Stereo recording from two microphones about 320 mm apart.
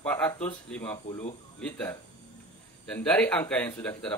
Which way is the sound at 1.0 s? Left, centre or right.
Centre.